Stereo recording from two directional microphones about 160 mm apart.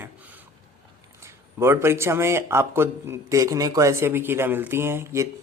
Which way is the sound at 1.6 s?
15° right (ahead or behind).